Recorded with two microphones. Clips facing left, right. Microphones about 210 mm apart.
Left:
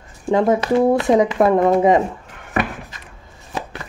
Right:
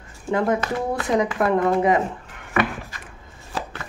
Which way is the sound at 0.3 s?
25° left (ahead or behind).